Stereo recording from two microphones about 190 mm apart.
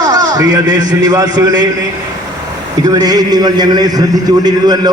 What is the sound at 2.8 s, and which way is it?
A man's voice, 20° right (ahead or behind).